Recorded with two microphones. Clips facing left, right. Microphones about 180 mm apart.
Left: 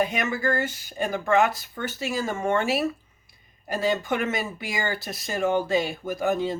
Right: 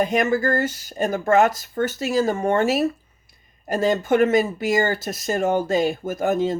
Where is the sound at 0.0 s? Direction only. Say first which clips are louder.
Right 5 dB; 45° right (ahead or behind).